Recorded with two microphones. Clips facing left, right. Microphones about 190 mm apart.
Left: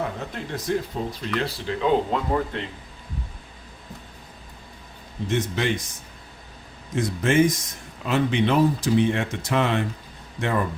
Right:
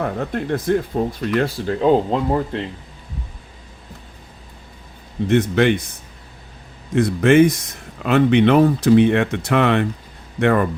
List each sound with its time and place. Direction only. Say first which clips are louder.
0.0 s speech: right 7 dB; 55° right (ahead or behind); by 2.6 s 35° right (ahead or behind)
5.3 s speech: right 9 dB; 60° right (ahead or behind)
6.9 s speech: right 7 dB; 65° right (ahead or behind)